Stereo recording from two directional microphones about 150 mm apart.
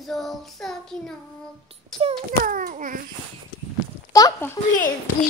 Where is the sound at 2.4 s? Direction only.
60° right (ahead or behind).